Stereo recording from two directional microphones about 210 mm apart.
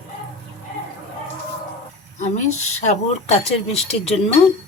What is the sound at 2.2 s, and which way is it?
Speech, 35° left (ahead or behind).